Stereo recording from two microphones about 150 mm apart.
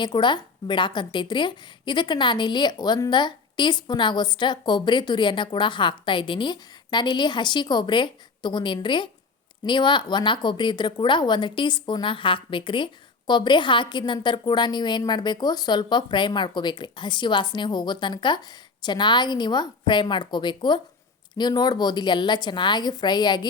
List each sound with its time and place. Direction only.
0.0 s a woman's voice: 30° left (ahead or behind)